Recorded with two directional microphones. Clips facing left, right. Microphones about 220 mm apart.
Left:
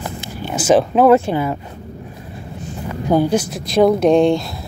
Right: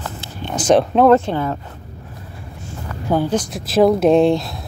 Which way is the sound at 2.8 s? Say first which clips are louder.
Left 3 dB; 15° left (ahead or behind).